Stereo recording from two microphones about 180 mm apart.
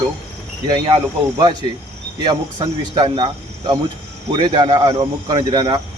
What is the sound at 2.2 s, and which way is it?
Speech, 25° right (ahead or behind).